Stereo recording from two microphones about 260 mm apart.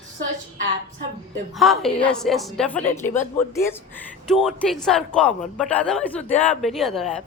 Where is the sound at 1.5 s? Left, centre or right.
Centre.